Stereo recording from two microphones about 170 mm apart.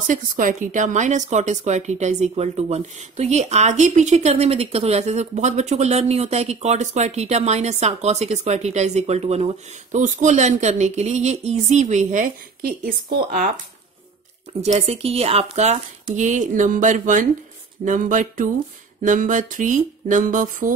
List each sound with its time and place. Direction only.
0.0 s a woman's voice: 50° right (ahead or behind)
14.6 s a woman's voice: 40° right (ahead or behind)